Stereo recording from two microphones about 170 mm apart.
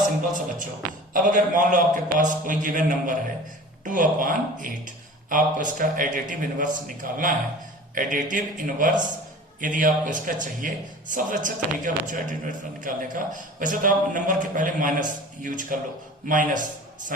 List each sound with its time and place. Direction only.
1.1 s a man's voice: 50° right (ahead or behind)